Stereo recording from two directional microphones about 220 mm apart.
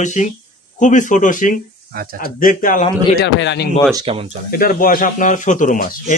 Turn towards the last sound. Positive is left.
turn(degrees=35)  # may be behind; listen again after turning